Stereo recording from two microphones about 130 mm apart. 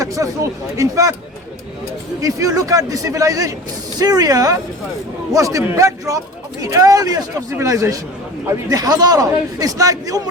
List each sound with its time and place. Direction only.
0.0 s a man's voice: 25° right (ahead or behind)
2.2 s a man's voice: 25° right (ahead or behind)